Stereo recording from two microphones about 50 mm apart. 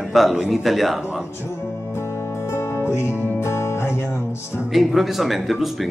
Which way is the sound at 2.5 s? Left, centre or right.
Left.